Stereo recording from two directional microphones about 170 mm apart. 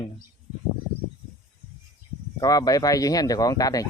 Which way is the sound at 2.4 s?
20° left (ahead or behind).